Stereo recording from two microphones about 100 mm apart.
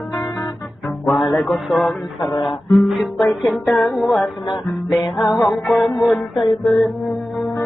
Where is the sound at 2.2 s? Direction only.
45° left (ahead or behind).